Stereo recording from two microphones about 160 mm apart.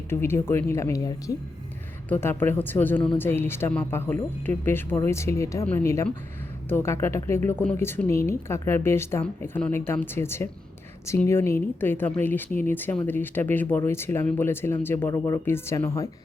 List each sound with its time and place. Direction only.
0.1 s speech: 15° left (ahead or behind)